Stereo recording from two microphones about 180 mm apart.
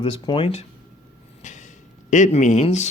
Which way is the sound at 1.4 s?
40° left (ahead or behind).